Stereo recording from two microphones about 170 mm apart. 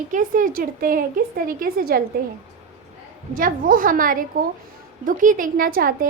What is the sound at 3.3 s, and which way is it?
A woman's voice, 55° right (ahead or behind).